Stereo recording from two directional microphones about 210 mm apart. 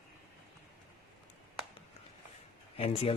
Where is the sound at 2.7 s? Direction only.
30° left (ahead or behind).